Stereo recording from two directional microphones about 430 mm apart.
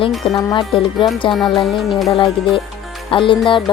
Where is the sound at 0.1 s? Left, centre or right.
Centre.